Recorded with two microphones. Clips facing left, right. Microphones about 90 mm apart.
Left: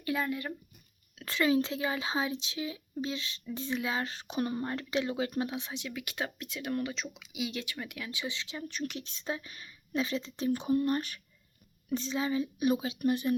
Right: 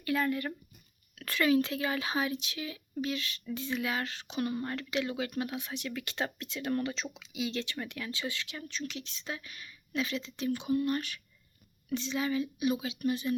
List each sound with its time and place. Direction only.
0.0 s speech: 15° left (ahead or behind)
8.9 s speech: 45° left (ahead or behind)
9.2 s speech: 30° left (ahead or behind)
12.1 s speech: 25° left (ahead or behind)
12.5 s speech: 40° left (ahead or behind)